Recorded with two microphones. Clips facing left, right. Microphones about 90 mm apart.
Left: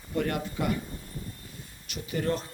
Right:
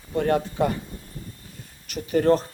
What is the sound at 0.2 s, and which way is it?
Speech, 35° right (ahead or behind).